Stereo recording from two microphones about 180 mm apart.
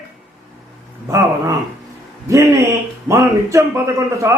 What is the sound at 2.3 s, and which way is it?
A man's voice, 15° right (ahead or behind).